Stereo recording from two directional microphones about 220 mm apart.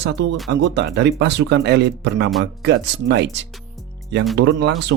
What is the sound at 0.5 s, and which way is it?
Speech, 55° right (ahead or behind).